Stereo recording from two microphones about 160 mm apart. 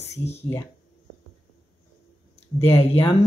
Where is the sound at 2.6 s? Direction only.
40° left (ahead or behind).